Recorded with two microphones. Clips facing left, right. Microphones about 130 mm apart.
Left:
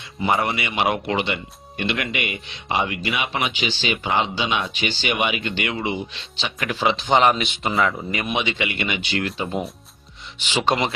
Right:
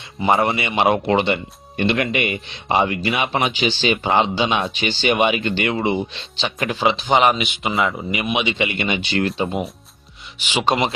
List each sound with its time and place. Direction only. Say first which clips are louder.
0.2 s speech: right 4 dB; 25° right (ahead or behind); by 7.8 s centre (ahead or behind)
8.1 s speech: right 3 dB; 10° right (ahead or behind)
8.5 s speech: right 4 dB; 25° right (ahead or behind)
10.4 s speech: right 2 dB; 15° right (ahead or behind)